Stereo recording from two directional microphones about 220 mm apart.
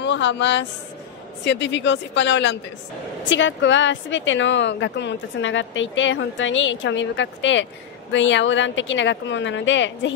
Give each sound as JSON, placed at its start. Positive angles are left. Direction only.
{"t": 0.0, "sound": "a woman's voice", "side_deg": 55}